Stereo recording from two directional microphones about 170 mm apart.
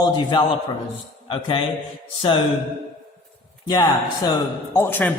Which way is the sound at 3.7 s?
25° left (ahead or behind).